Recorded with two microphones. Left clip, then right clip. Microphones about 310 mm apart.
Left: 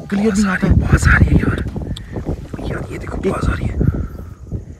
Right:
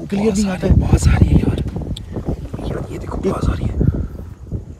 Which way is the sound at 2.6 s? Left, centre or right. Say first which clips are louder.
Left 1 dB; centre.